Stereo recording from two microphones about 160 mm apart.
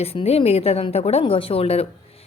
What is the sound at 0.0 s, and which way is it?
A woman's voice, 40° left (ahead or behind).